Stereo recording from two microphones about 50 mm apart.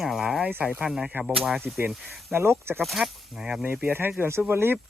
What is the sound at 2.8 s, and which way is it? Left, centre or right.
Speech, centre.